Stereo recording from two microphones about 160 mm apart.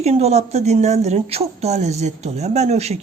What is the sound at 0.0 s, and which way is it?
A woman's voice, 40° right (ahead or behind).